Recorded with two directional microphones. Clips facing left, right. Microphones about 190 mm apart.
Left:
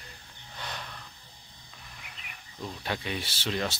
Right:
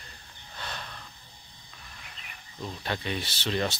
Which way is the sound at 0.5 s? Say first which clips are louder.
Even; 15° left (ahead or behind).